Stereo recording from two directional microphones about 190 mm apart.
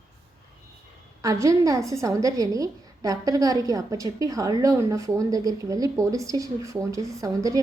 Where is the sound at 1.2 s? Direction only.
15° right (ahead or behind).